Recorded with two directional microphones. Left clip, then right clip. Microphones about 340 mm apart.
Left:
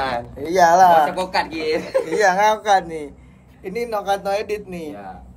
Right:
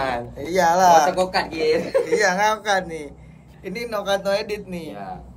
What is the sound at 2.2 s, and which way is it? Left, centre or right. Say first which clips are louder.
A man's voice: left 7 dB; centre.